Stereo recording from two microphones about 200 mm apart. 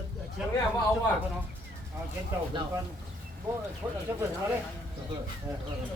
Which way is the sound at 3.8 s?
10° right (ahead or behind).